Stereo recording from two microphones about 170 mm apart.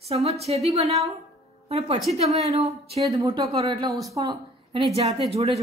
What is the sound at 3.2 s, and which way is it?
Speech, 25° right (ahead or behind).